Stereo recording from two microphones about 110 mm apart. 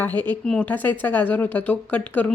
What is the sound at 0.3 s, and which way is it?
A woman's voice, 10° left (ahead or behind).